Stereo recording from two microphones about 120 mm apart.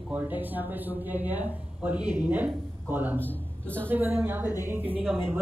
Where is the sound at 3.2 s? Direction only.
10° left (ahead or behind).